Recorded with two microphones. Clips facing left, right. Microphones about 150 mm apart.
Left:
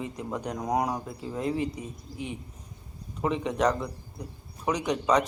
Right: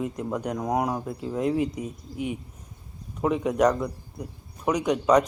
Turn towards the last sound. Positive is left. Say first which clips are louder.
# right 4 dB
turn(degrees=-5)  # may be behind; listen again after turning